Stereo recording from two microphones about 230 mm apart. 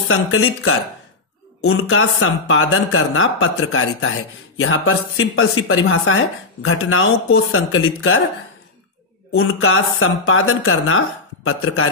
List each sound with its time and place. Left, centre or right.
0.1 s speech: left
9.3 s speech: left